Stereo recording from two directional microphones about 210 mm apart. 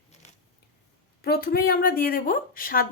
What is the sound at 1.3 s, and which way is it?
A woman's voice, 45° left (ahead or behind).